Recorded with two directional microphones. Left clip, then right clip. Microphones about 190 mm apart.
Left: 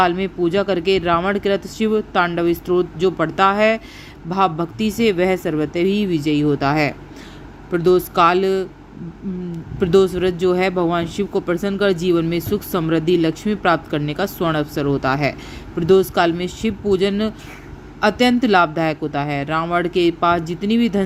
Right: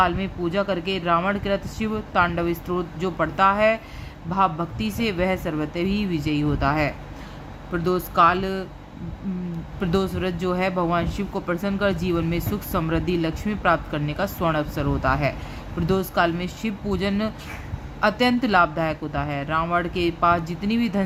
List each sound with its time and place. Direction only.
0.0 s speech: 25° left (ahead or behind)
9.8 s speech: 20° left (ahead or behind)